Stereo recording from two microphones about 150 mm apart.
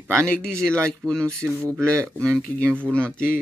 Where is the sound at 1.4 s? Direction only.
20° right (ahead or behind).